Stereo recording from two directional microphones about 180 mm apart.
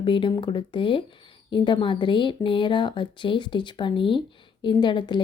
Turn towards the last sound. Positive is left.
turn(degrees=25)  # may be behind; listen again after turning